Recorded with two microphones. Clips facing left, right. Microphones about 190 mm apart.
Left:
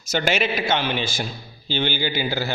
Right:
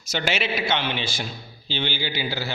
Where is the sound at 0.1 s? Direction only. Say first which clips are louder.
Left 4 dB; 45° left (ahead or behind).